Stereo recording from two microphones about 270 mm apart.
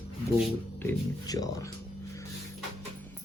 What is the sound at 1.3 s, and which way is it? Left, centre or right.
Speech, centre.